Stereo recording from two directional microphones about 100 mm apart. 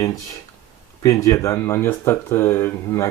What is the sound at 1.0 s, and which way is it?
Speech, 30° left (ahead or behind).